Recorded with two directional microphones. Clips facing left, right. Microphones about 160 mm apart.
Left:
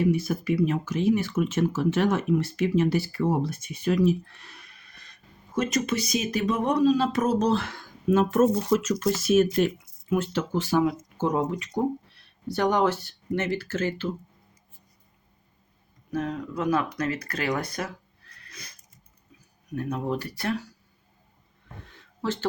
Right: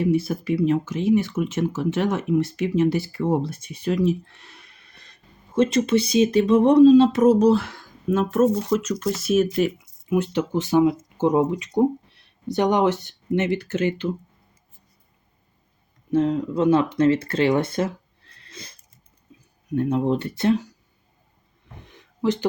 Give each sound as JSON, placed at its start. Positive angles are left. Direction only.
{"t": 0.0, "sound": "speech", "side_deg": -30}
{"t": 10.1, "sound": "speech", "side_deg": -15}
{"t": 16.1, "sound": "speech", "side_deg": -25}
{"t": 19.3, "sound": "a sound", "side_deg": -30}
{"t": 19.7, "sound": "speech", "side_deg": -25}
{"t": 21.8, "sound": "a sound", "side_deg": -15}